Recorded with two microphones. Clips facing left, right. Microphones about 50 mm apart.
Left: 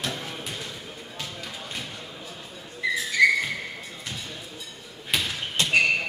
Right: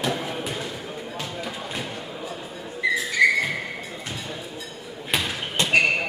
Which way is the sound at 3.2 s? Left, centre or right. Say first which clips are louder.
Even; centre.